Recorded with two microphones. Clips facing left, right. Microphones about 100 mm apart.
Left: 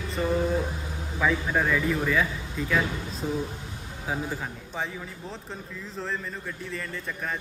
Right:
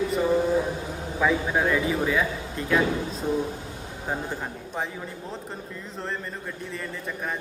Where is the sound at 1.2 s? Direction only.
5° right (ahead or behind).